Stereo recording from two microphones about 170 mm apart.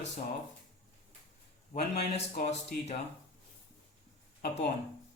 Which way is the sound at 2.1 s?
40° left (ahead or behind).